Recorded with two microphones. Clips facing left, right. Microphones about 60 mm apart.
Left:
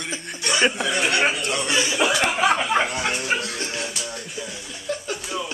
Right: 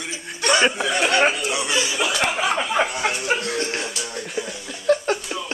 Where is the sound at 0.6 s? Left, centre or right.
Centre.